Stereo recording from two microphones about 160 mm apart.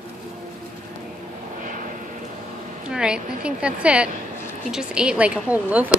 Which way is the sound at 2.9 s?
5° right (ahead or behind).